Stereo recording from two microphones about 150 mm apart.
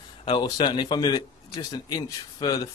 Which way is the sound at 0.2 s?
30° left (ahead or behind).